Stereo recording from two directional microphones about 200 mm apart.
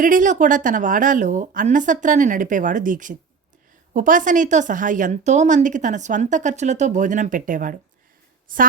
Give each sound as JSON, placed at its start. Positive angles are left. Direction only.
{"t": 0.0, "sound": "a woman's voice", "side_deg": -40}